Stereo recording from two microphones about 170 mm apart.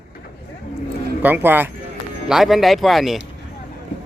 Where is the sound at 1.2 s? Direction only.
10° right (ahead or behind).